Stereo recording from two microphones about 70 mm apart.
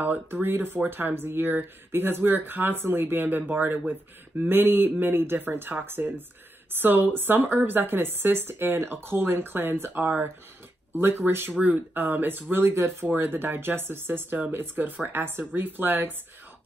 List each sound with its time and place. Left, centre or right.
0.0 s speech: right